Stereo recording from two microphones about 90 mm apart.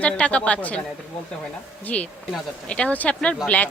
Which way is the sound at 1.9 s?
15° left (ahead or behind).